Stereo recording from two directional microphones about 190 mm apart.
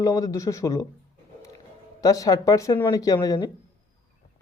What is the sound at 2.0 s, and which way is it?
Speech, 20° left (ahead or behind).